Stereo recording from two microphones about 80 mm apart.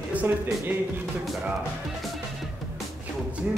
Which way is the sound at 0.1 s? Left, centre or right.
Centre.